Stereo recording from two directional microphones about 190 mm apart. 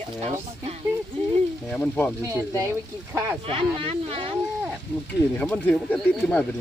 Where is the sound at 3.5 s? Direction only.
30° right (ahead or behind).